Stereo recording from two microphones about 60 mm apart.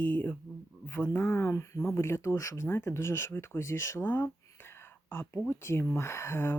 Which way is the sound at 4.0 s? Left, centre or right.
Left.